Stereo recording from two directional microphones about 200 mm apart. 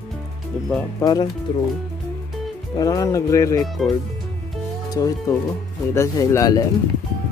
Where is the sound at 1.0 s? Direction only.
20° left (ahead or behind).